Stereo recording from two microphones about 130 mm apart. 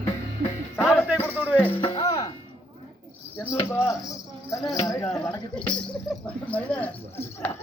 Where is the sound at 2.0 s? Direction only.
25° left (ahead or behind).